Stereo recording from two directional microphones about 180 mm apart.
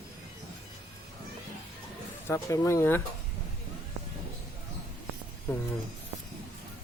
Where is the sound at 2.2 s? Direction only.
15° left (ahead or behind).